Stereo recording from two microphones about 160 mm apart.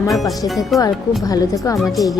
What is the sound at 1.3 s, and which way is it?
Speech, 20° left (ahead or behind).